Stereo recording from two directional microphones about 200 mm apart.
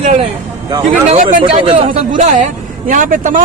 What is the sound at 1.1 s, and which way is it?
Speech, 35° right (ahead or behind).